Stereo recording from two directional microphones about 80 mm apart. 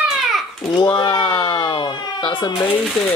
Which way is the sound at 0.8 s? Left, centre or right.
Left.